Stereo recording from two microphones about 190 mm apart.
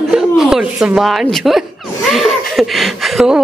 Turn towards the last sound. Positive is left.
turn(degrees=0)  # may be behind; listen again after turning